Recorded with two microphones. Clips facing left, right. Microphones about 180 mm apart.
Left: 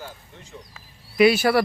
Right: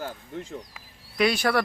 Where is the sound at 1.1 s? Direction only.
5° left (ahead or behind).